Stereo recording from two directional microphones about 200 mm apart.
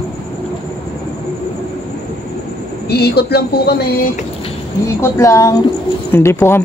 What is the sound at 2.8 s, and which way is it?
Speech, 55° left (ahead or behind).